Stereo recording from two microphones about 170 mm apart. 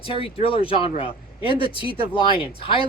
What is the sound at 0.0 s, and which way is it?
Speech, 35° left (ahead or behind).